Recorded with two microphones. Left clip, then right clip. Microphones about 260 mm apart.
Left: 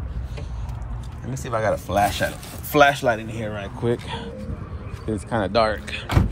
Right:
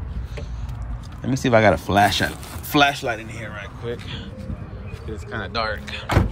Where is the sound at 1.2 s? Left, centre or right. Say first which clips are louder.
Right 7 dB; right.